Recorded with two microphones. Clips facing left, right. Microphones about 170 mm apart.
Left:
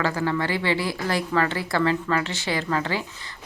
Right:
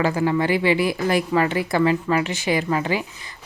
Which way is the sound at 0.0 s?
15° right (ahead or behind).